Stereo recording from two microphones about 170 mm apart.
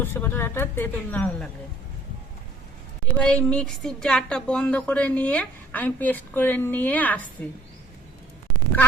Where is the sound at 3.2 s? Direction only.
5° left (ahead or behind).